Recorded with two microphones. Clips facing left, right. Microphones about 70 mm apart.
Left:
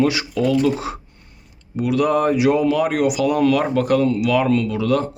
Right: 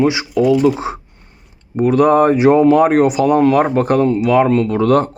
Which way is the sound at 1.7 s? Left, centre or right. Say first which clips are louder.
Right 7 dB; right.